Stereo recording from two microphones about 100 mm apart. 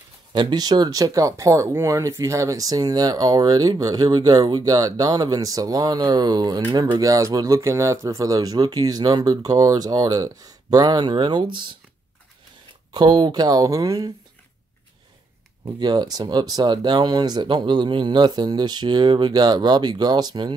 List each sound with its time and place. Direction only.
0.3 s speech: 45° right (ahead or behind)
7.0 s speech: 35° right (ahead or behind); by 11.7 s 50° right (ahead or behind)
12.9 s speech: 50° right (ahead or behind)
15.6 s speech: 45° right (ahead or behind)